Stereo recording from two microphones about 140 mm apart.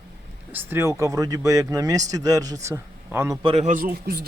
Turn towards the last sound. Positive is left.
turn(degrees=-75)  # may be behind; listen again after turning